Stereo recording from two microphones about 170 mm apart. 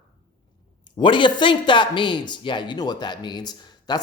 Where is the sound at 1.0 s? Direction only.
30° left (ahead or behind).